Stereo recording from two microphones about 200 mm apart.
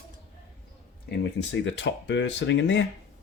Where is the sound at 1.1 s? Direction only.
60° left (ahead or behind).